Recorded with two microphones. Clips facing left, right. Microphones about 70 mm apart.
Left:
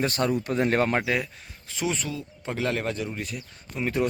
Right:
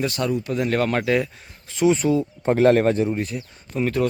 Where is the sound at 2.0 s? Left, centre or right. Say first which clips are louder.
Right 13 dB; right.